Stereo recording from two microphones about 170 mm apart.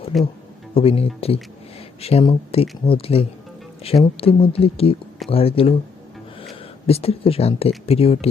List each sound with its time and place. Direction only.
0.1 s speech: centre (ahead or behind)
0.7 s speech: 35° left (ahead or behind)